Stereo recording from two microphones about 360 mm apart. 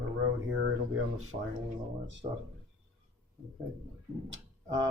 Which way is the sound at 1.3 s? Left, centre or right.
Centre.